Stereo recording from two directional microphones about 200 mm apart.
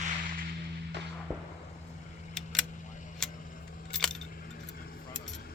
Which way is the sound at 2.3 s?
Centre (ahead or behind).